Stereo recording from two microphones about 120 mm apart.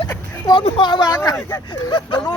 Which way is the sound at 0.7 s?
45° left (ahead or behind).